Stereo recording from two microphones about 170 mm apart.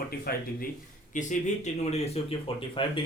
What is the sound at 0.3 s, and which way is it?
Speech, 60° left (ahead or behind).